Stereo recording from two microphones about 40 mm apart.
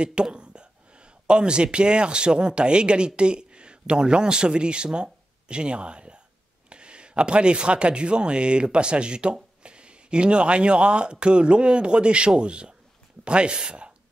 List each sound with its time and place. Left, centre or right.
0.0 s speech: right